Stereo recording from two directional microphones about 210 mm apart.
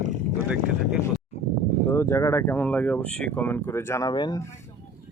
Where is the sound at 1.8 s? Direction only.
15° left (ahead or behind).